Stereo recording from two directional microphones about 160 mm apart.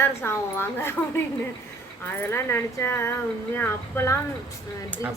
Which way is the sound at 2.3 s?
15° left (ahead or behind).